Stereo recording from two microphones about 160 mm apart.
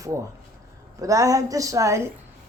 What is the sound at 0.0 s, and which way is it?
A man's voice, 20° right (ahead or behind).